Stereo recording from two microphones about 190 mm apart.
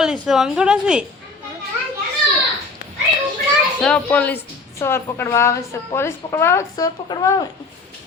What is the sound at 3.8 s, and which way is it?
A woman's voice, 5° left (ahead or behind).